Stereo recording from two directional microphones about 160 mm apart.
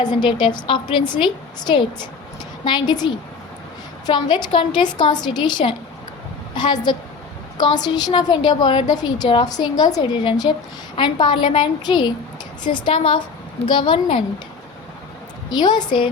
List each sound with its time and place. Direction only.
0.0 s a woman's voice: 25° left (ahead or behind)
15.4 s a woman's voice: 25° left (ahead or behind)